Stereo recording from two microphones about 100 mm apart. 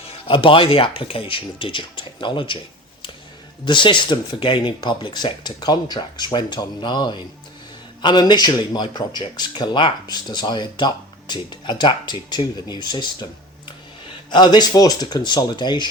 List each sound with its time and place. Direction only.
0.0 s speech: 60° left (ahead or behind)
3.7 s speech: 55° left (ahead or behind)
14.3 s speech: 45° left (ahead or behind)